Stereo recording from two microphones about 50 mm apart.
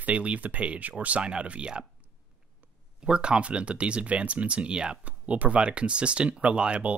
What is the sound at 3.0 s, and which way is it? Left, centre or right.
Speech, right.